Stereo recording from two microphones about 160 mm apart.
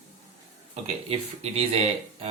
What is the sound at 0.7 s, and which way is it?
Speech, 40° right (ahead or behind).